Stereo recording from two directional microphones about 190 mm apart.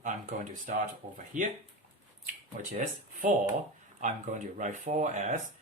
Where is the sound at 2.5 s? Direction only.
40° right (ahead or behind).